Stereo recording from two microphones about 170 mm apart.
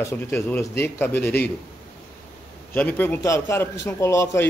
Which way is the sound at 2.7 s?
10° left (ahead or behind).